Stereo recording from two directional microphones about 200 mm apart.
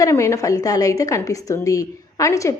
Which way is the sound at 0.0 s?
15° left (ahead or behind).